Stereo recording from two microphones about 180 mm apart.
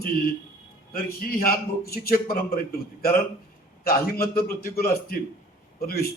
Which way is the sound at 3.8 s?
55° left (ahead or behind).